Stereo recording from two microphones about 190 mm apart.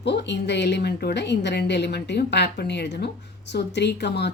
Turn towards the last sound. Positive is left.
turn(degrees=65)  # may be behind; listen again after turning